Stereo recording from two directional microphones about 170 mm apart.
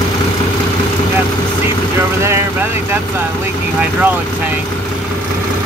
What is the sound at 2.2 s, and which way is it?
Speech, 15° right (ahead or behind).